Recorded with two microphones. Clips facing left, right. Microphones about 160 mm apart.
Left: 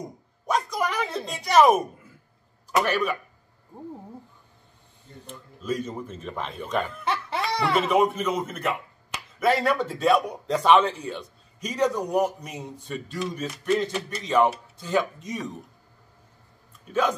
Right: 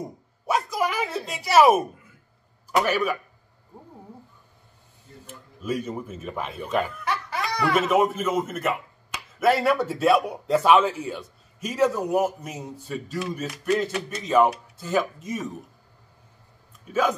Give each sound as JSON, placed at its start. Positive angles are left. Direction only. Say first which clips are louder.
{"t": 0.5, "sound": "speech", "louder": "right 1 dB", "side_deg": -5}
{"t": 5.2, "sound": "speech", "louder": "right 1 dB", "side_deg": -10}
{"t": 7.1, "sound": "speech", "louder": "left 1 dB", "side_deg": 25}
{"t": 7.9, "sound": "a man's voice", "louder": "right 1 dB", "side_deg": -5}